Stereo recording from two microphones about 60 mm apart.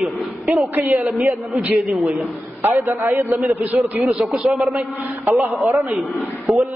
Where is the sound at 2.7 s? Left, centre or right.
Right.